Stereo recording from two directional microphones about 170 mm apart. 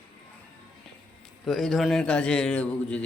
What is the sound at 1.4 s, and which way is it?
A man's voice, centre (ahead or behind).